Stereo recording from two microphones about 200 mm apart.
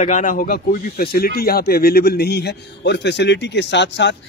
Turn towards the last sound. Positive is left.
turn(degrees=60)  # may be behind; listen again after turning